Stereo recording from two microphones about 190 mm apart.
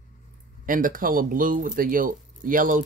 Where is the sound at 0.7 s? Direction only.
45° right (ahead or behind).